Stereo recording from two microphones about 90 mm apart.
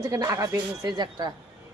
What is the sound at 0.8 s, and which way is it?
Speech, 55° right (ahead or behind).